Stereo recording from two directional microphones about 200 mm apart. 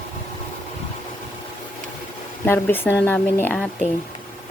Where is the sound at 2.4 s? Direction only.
10° left (ahead or behind).